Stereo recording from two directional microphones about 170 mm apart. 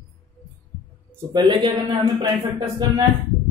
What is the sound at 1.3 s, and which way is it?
A man's voice, 25° right (ahead or behind).